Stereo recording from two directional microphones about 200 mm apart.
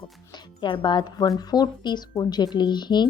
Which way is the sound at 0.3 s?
25° left (ahead or behind).